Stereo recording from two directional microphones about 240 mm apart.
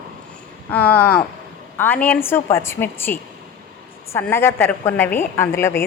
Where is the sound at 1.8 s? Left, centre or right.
Centre.